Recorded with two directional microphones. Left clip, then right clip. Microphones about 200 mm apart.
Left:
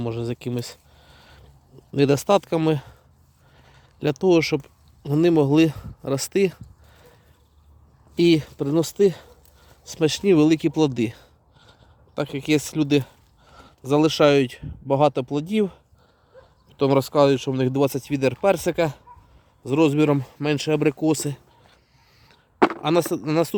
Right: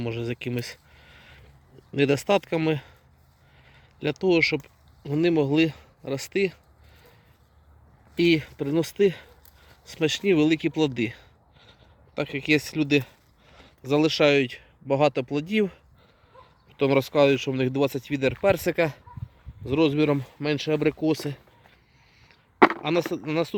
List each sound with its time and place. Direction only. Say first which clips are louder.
0.0 s a sound: left 2 dB; 10° left (ahead or behind)
1.9 s speech: left 3 dB; 15° left (ahead or behind)
4.0 s speech: left 3 dB; 20° left (ahead or behind)
8.1 s speech: left 3 dB; 15° left (ahead or behind)
22.5 s a sound: right 2 dB; centre (ahead or behind)
22.8 s speech: left 4 dB; 20° left (ahead or behind)